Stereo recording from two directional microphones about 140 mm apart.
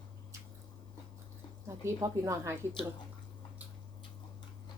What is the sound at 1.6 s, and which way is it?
Speech, 20° right (ahead or behind).